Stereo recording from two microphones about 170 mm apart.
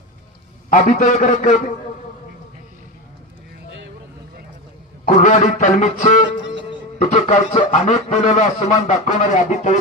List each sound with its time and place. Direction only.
0.7 s a man's voice: 45° left (ahead or behind)
5.0 s a man's voice: 45° left (ahead or behind)